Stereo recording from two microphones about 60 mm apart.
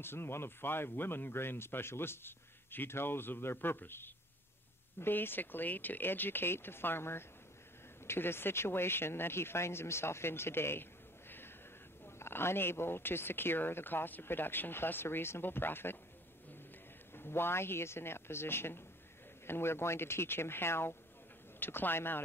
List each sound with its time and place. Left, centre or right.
0.0 s speech: left
17.1 s speech: left